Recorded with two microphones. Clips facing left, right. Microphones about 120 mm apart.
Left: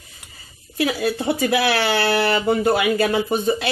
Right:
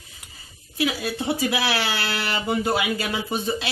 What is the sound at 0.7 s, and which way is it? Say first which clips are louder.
Speech: left 4 dB; 50° left (ahead or behind).